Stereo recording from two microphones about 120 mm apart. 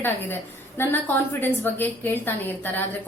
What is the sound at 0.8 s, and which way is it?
A woman's voice, 20° left (ahead or behind).